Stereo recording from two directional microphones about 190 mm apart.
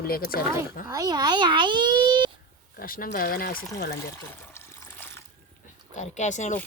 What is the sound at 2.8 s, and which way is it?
Speech, 50° left (ahead or behind).